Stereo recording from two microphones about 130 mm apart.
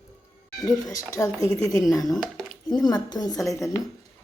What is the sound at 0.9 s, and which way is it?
A woman's voice, 25° left (ahead or behind).